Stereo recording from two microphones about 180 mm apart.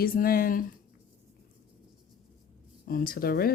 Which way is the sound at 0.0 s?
55° left (ahead or behind).